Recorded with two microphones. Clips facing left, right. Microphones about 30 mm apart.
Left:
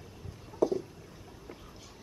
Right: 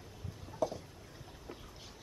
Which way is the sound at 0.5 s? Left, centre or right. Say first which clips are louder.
Left 7 dB; centre.